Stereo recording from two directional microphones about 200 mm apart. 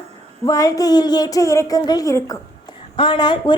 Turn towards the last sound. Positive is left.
turn(degrees=25)  # may be behind; listen again after turning